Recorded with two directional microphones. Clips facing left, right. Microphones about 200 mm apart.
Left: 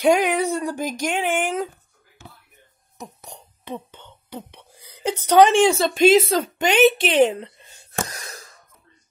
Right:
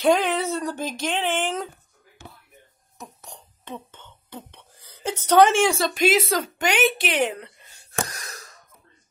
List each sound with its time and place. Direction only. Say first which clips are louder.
0.0 s speech: left 2 dB; 15° left (ahead or behind)
3.0 s speech: left 3 dB; 10° left (ahead or behind)